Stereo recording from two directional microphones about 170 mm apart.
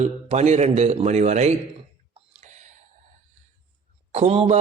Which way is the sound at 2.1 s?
45° right (ahead or behind).